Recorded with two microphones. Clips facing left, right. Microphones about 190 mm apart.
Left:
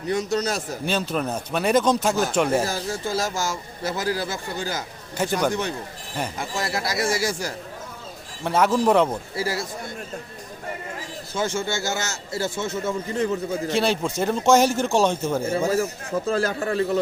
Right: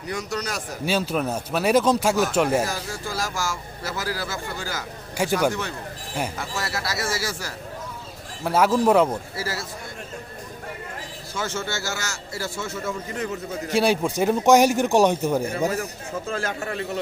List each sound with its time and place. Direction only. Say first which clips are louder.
0.1 s a man's voice: left 5 dB; 25° left (ahead or behind)
0.9 s speech: right 2 dB; 5° right (ahead or behind)
2.6 s a man's voice: left 3 dB; 25° left (ahead or behind)
5.1 s speech: right 1 dB; 10° right (ahead or behind)
5.5 s speech: left 2 dB; 20° left (ahead or behind)
8.4 s speech: right 1 dB; 5° right (ahead or behind)
9.3 s speech: left 4 dB; 15° left (ahead or behind)
11.3 s a man's voice: left 4 dB; 15° left (ahead or behind)
13.7 s speech: right 3 dB; 10° right (ahead or behind)
16.2 s a man's voice: left 5 dB; 35° left (ahead or behind)